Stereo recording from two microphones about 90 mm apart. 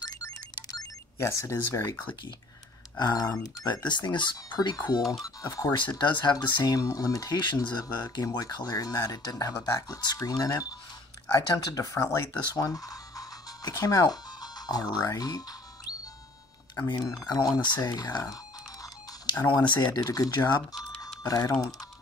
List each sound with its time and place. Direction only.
0.0 s music: 45° left (ahead or behind)
3.0 s speech: 50° left (ahead or behind)
4.6 s speech: 50° left (ahead or behind)
5.2 s speech: 45° left (ahead or behind)
12.5 s speech: 40° left (ahead or behind)
16.7 s speech: 45° left (ahead or behind)